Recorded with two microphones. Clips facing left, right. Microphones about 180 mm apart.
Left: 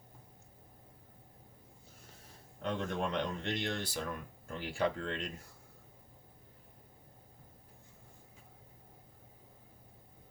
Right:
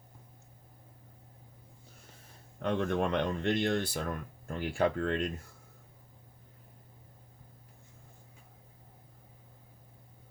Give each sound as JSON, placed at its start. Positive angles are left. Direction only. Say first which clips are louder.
{"t": 2.6, "sound": "speech", "louder": "right 6 dB", "side_deg": -55}